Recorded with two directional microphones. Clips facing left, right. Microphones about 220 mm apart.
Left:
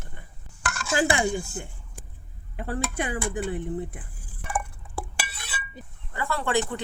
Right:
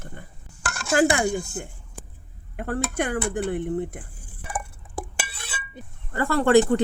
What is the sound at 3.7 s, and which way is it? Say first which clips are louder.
Speech: right 4 dB; 50° right (ahead or behind).